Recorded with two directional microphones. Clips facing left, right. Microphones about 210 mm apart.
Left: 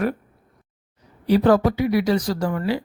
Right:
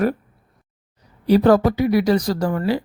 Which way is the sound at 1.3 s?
40° right (ahead or behind).